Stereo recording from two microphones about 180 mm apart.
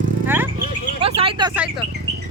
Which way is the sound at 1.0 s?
30° right (ahead or behind).